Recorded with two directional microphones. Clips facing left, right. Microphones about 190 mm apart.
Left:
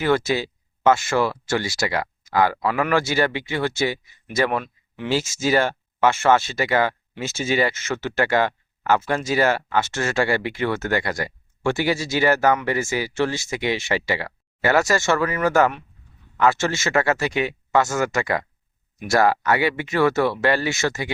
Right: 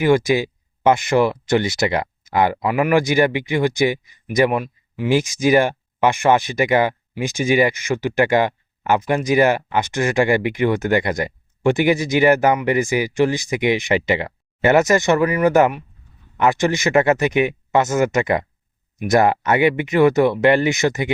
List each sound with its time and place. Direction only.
0.0 s speech: 15° right (ahead or behind)